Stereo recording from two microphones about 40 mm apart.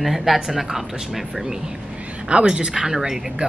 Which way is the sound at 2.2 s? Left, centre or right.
Right.